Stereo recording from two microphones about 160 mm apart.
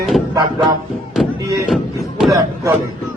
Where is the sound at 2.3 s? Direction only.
20° right (ahead or behind).